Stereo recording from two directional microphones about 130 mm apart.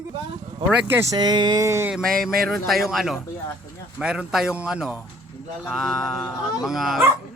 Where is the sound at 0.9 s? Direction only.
20° right (ahead or behind).